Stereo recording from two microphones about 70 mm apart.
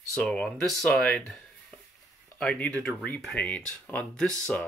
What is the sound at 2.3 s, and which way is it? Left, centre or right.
Speech, centre.